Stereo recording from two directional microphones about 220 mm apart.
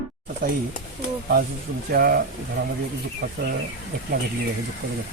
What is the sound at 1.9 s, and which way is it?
Speech, 40° right (ahead or behind).